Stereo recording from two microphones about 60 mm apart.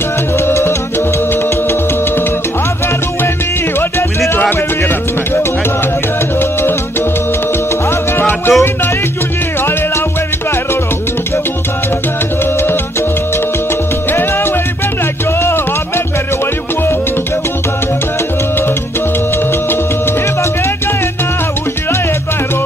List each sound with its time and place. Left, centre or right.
0.5 s music: left
4.4 s music: left
8.2 s music: left